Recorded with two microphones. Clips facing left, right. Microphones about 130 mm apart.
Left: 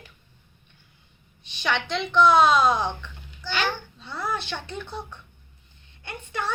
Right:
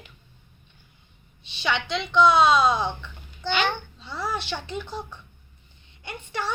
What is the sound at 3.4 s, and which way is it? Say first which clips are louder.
Speech: right 5 dB; 60° right (ahead or behind).